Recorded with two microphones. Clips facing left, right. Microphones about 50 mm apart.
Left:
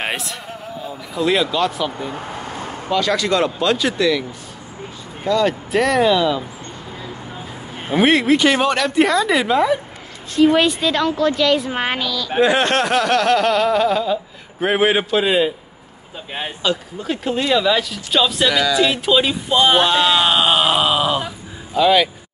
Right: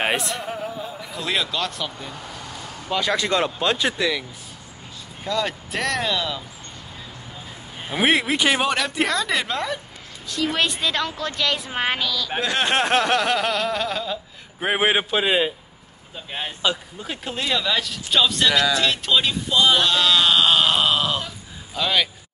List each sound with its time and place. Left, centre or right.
0.0 s speech: centre
2.1 s vehicle: left
2.9 s speech: right
5.2 s speech: centre
8.0 s speech: centre
12.8 s speech: right
13.1 s speech: centre
14.7 s a man's voice: centre
16.6 s speech: centre
19.5 s speech: left; by 22.1 s centre